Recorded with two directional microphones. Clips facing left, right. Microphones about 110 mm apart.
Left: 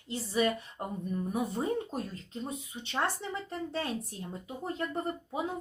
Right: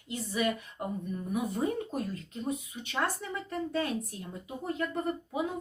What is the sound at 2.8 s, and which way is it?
Speech, 30° left (ahead or behind).